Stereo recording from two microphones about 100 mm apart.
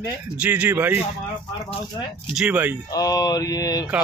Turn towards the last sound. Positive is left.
turn(degrees=40)  # may be behind; listen again after turning